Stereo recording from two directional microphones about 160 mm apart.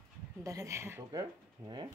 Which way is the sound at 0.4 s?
20° right (ahead or behind).